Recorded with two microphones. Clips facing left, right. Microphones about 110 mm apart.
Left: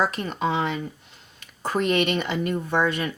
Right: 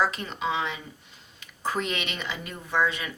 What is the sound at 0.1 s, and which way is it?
Speech, 50° left (ahead or behind).